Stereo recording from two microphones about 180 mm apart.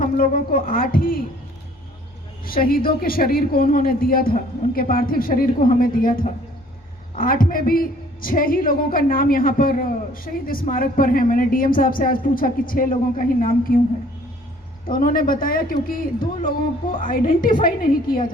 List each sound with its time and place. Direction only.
0.0 s a woman's voice: 50° left (ahead or behind)
2.4 s a woman's voice: 55° left (ahead or behind)
14.8 s a woman's voice: 50° left (ahead or behind)